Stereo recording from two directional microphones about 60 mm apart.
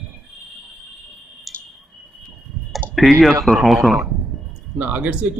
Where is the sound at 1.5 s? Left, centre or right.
Centre.